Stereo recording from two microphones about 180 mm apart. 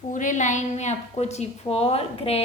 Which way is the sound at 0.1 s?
45° left (ahead or behind).